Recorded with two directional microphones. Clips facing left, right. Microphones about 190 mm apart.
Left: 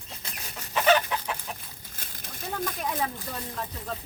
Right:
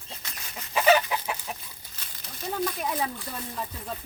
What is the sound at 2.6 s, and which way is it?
Speech, centre (ahead or behind).